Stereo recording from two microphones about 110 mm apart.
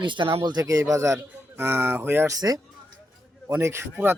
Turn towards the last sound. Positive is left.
turn(degrees=-20)  # may be behind; listen again after turning